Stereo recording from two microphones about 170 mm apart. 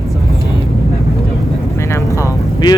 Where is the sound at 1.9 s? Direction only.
15° left (ahead or behind).